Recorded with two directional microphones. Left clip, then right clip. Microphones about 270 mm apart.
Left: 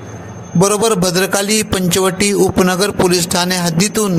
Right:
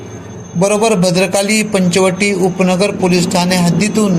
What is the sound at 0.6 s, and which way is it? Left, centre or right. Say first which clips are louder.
A man's voice: right 1 dB; left.